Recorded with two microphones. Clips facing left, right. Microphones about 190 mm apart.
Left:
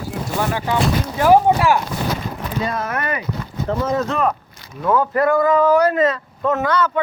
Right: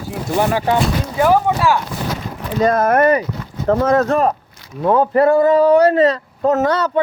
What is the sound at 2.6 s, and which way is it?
Speech, 50° right (ahead or behind).